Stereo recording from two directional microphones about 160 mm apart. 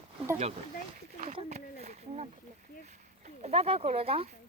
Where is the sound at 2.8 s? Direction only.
45° right (ahead or behind).